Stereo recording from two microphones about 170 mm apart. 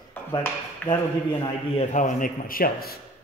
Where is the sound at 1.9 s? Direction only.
50° left (ahead or behind).